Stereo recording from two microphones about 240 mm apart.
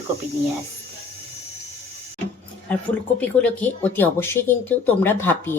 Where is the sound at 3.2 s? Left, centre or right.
Centre.